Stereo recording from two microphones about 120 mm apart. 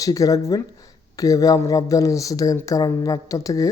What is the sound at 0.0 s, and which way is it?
Speech, 30° left (ahead or behind).